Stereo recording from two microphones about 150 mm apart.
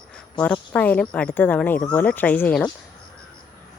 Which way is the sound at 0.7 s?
10° left (ahead or behind).